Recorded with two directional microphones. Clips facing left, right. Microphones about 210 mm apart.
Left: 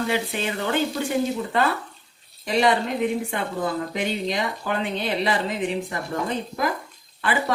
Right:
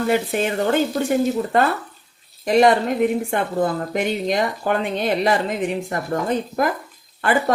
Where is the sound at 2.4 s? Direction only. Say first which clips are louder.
Right 6 dB; 50° right (ahead or behind).